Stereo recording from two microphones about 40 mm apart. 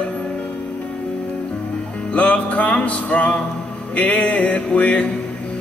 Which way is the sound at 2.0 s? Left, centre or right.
Left.